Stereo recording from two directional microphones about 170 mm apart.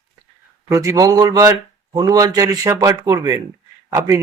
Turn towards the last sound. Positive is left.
turn(degrees=-15)  # may be behind; listen again after turning